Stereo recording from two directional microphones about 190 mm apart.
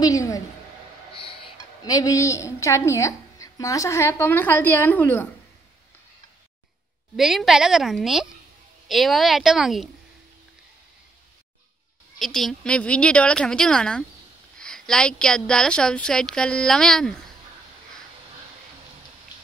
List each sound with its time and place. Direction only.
0.0 s a woman's voice: 20° left (ahead or behind)
1.1 s a woman's voice: 30° left (ahead or behind); by 5.3 s 10° left (ahead or behind)
7.2 s a woman's voice: centre (ahead or behind)
12.2 s a woman's voice: centre (ahead or behind)